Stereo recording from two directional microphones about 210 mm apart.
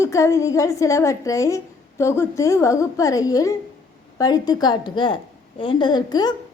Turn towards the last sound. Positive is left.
turn(degrees=20)  # may be behind; listen again after turning